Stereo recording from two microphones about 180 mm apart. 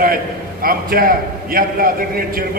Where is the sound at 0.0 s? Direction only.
55° right (ahead or behind).